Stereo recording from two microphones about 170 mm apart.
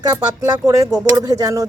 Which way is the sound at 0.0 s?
20° right (ahead or behind).